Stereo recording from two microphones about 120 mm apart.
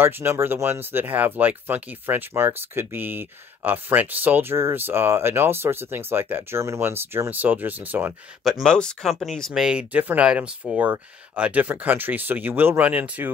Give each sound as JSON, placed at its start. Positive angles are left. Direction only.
{"t": 0.0, "sound": "speech", "side_deg": -20}
{"t": 8.6, "sound": "speech", "side_deg": 5}